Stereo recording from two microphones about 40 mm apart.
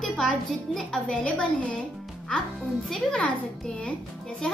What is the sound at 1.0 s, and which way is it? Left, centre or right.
Speech, left.